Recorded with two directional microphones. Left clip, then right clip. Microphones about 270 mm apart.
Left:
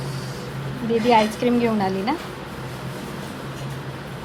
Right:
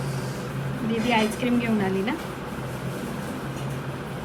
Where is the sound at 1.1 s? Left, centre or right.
Left.